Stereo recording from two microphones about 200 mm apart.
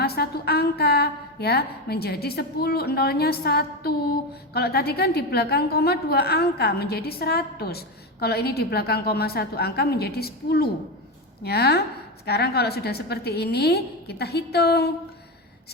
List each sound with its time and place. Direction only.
0.0 s a woman's voice: 50° left (ahead or behind)